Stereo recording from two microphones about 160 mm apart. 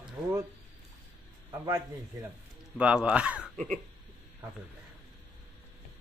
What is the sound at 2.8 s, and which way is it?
Speech, 5° right (ahead or behind).